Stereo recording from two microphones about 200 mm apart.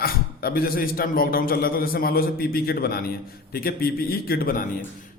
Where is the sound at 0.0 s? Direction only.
50° left (ahead or behind).